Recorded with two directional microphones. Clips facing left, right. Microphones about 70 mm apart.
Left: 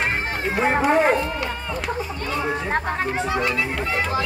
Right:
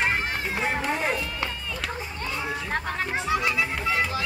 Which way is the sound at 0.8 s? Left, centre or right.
Left.